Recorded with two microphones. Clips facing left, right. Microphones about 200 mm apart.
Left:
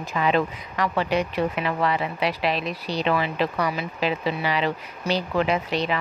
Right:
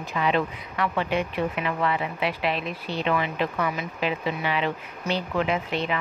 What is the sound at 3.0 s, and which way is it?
A woman's voice, 35° left (ahead or behind).